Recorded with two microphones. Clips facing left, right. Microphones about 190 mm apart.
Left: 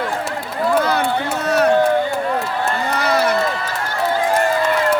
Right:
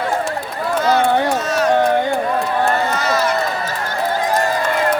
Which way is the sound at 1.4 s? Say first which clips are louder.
Left 2 dB; 60° left (ahead or behind).